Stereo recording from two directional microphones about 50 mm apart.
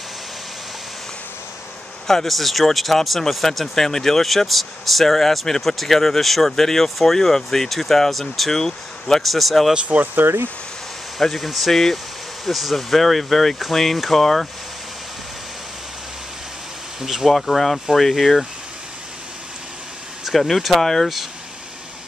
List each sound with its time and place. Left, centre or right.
2.0 s speech: centre
9.8 s speech: right
10.2 s speech: right
11.1 s speech: centre
17.0 s speech: centre
20.2 s speech: centre